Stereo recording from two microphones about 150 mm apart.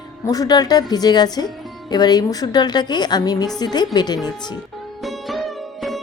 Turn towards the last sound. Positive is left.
turn(degrees=0)  # may be behind; listen again after turning